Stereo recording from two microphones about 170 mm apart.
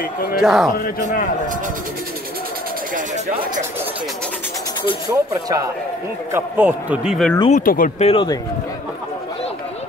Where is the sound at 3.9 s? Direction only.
Centre (ahead or behind).